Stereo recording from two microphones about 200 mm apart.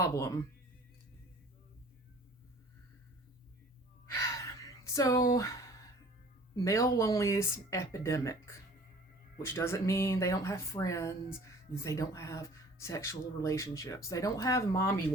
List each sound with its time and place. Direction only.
0.0 s speech: 15° left (ahead or behind)
4.0 s gasp: 15° left (ahead or behind)
6.7 s speech: 15° left (ahead or behind)